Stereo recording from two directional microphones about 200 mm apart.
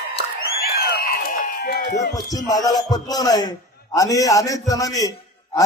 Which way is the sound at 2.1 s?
20° left (ahead or behind).